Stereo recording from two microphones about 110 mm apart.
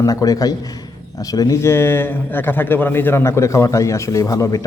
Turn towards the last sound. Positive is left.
turn(degrees=30)  # may be behind; listen again after turning